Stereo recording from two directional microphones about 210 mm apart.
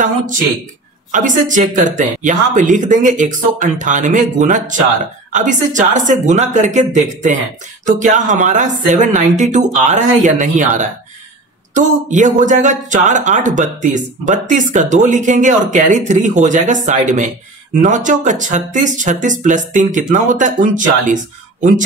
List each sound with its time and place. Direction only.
1.1 s speech: 35° right (ahead or behind)